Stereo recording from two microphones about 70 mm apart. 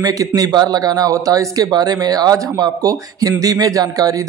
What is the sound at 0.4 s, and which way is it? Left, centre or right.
A man's voice, right.